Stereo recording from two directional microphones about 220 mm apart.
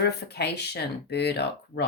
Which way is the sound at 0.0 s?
50° left (ahead or behind).